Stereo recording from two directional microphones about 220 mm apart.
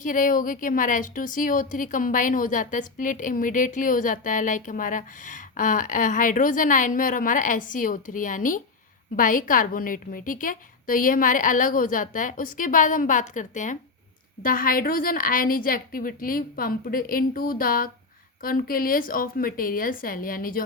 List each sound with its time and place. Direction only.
0.0 s a woman's voice: 40° left (ahead or behind)